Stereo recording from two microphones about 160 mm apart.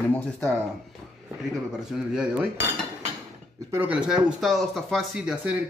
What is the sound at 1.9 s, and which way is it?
Speech, 5° right (ahead or behind).